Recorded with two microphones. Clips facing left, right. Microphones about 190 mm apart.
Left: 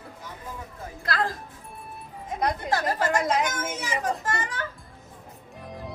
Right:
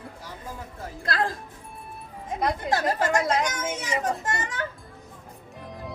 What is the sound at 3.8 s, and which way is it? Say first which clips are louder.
Speech: even; 25° right (ahead or behind).